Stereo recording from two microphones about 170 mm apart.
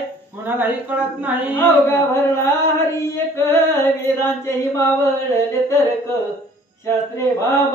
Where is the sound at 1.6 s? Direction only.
15° left (ahead or behind).